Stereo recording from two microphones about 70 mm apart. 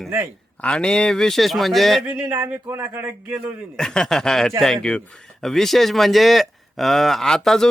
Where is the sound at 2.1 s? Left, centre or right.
Right.